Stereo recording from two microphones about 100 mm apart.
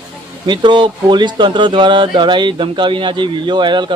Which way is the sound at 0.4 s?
50° right (ahead or behind).